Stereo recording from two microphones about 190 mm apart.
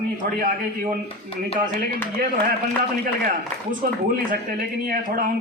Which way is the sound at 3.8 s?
50° right (ahead or behind).